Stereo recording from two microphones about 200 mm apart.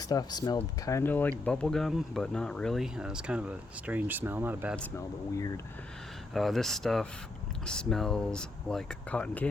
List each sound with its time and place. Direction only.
0.0 s speech: 20° left (ahead or behind); by 4.8 s 10° right (ahead or behind)
4.8 s speech: 15° left (ahead or behind)
6.3 s speech: centre (ahead or behind)